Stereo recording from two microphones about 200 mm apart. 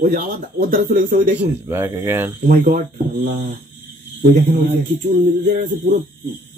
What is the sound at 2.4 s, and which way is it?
Speech, 45° right (ahead or behind).